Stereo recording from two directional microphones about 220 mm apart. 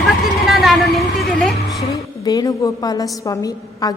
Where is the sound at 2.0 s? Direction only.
15° left (ahead or behind).